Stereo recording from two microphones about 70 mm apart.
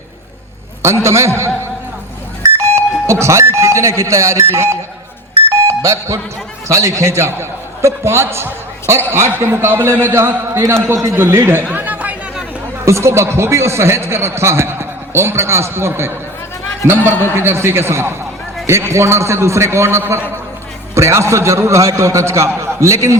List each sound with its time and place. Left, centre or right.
1.0 s a man's voice: right
5.5 s doorbell: right
6.7 s a man's voice: right
11.7 s chatter: right
12.8 s a man's voice: right